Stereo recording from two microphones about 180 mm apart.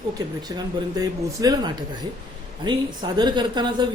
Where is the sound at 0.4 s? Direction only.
20° right (ahead or behind).